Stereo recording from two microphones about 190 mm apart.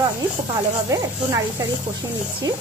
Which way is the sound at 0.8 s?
15° right (ahead or behind).